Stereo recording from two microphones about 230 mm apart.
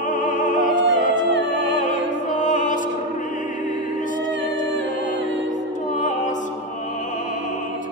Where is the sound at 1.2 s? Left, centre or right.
Right.